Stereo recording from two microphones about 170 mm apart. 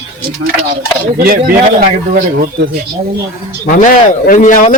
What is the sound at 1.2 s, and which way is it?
Speech, 55° right (ahead or behind).